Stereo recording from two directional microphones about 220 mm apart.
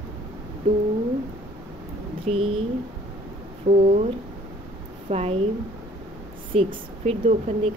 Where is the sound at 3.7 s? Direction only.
30° right (ahead or behind).